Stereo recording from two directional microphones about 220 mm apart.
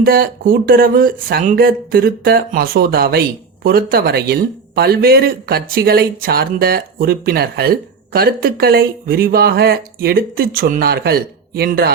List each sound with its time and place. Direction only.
0.0 s speech: 40° right (ahead or behind)